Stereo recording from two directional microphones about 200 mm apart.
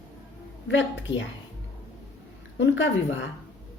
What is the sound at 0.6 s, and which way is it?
Speech, 65° left (ahead or behind).